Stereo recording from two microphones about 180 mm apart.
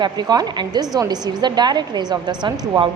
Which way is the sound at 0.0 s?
20° right (ahead or behind).